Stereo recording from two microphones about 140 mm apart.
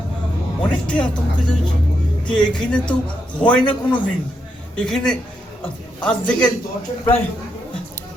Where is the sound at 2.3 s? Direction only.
5° left (ahead or behind).